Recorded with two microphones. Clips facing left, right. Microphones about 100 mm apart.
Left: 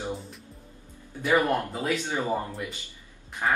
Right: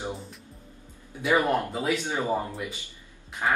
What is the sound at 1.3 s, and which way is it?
Speech, 10° right (ahead or behind).